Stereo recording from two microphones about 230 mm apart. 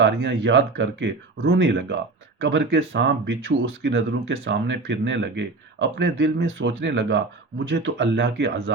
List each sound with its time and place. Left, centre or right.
0.0 s speech: right